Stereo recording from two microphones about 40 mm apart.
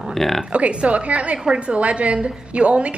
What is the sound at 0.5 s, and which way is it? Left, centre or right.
A woman's voice, right.